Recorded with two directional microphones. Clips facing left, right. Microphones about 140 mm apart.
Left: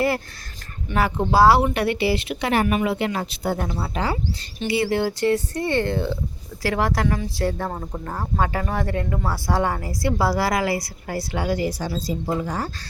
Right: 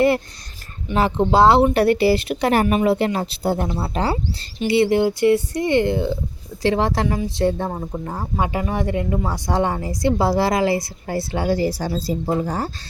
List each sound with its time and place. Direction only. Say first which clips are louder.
0.9 s speech: right 2 dB; 25° right (ahead or behind)
1.7 s speech: right 6 dB; 40° right (ahead or behind); by 7.7 s 20° right (ahead or behind)
7.7 s speech: right 3 dB; 10° right (ahead or behind); by 12.7 s 30° right (ahead or behind)